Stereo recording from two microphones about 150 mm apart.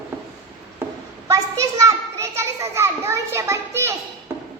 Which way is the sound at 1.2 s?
20° right (ahead or behind).